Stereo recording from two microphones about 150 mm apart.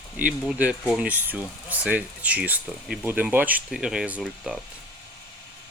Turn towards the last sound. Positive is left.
turn(degrees=-5)  # may be behind; listen again after turning